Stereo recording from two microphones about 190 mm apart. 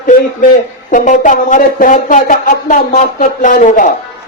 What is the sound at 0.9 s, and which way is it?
Speech, 40° left (ahead or behind).